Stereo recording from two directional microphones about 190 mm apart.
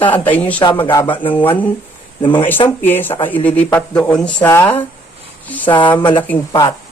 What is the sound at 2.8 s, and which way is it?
Speech, 10° left (ahead or behind).